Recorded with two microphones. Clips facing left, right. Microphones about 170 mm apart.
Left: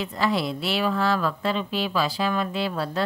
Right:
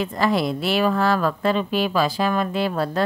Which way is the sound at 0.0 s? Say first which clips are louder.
Right 4 dB; 50° right (ahead or behind).